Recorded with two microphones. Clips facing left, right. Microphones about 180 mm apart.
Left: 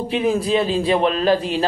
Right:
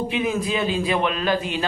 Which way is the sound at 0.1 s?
35° left (ahead or behind).